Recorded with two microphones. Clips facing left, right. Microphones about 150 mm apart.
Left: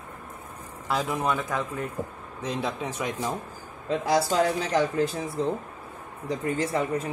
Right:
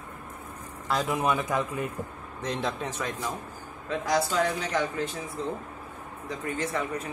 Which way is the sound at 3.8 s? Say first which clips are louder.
Left 3 dB; 30° left (ahead or behind).